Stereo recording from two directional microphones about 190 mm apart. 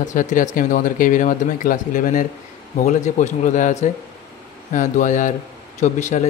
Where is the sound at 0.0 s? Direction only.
40° left (ahead or behind).